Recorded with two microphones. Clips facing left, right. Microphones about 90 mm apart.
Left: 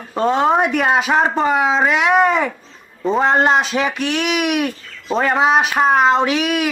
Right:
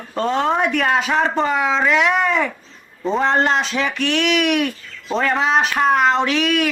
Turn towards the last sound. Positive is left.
turn(degrees=15)  # may be behind; listen again after turning